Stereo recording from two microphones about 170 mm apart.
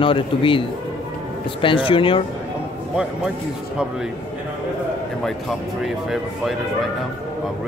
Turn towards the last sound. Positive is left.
turn(degrees=0)  # may be behind; listen again after turning